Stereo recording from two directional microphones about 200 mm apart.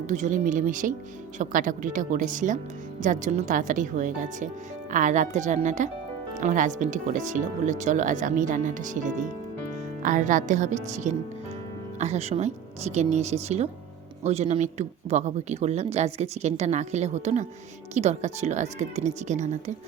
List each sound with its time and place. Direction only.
0.1 s speech: 40° right (ahead or behind)